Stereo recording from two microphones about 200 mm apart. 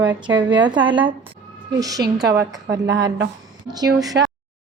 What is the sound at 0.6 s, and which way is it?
A woman's voice, 25° right (ahead or behind).